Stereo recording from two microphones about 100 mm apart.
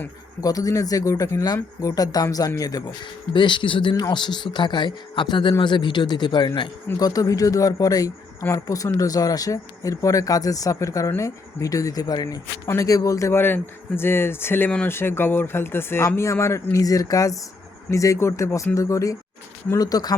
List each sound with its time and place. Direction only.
0.4 s speech: 35° left (ahead or behind)
3.3 s speech: 55° left (ahead or behind)
7.0 s speech: 35° left (ahead or behind)